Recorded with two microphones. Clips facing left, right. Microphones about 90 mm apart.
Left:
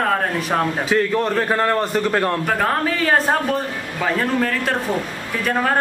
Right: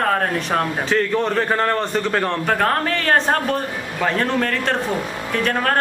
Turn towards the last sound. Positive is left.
turn(degrees=10)  # may be behind; listen again after turning